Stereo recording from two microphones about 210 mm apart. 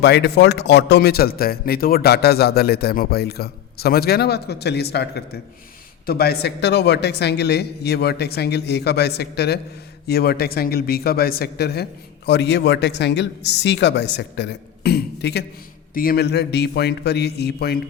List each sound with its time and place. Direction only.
0.0 s a man's voice: 55° left (ahead or behind)